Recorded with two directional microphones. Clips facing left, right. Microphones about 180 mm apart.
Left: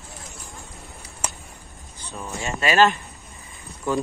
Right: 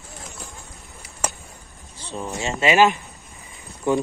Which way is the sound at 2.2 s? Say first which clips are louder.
Right 3 dB; 20° right (ahead or behind).